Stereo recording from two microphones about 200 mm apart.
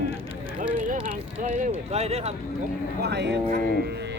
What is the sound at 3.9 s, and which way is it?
Music, 60° right (ahead or behind).